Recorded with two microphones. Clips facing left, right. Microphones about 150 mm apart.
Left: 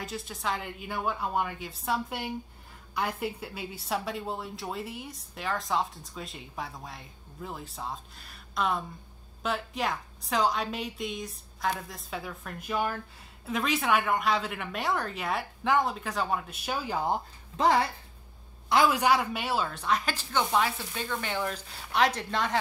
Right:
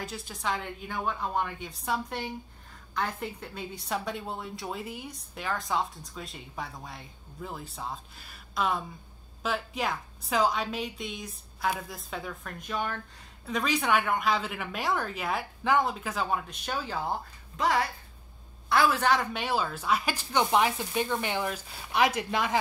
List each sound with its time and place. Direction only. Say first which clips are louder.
0.0 s a woman's voice: even; centre (ahead or behind)
17.6 s speech: left 3 dB; 30° left (ahead or behind)
18.7 s a woman's voice: left 1 dB; 15° left (ahead or behind); by 22.6 s 10° right (ahead or behind)